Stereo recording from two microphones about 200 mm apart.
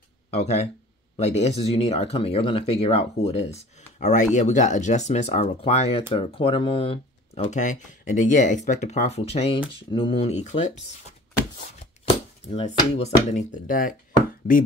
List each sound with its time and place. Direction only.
0.3 s speech: 35° left (ahead or behind)
12.4 s speech: 30° left (ahead or behind)